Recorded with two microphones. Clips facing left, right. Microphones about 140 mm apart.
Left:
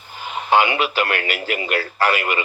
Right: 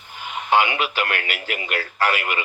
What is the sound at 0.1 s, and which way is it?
Speech, 35° left (ahead or behind).